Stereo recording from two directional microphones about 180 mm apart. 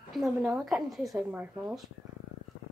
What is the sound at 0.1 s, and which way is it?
A woman's voice, centre (ahead or behind).